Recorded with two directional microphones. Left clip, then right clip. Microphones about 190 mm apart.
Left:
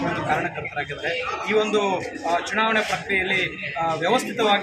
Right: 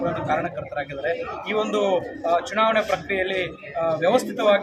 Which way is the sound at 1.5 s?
25° right (ahead or behind).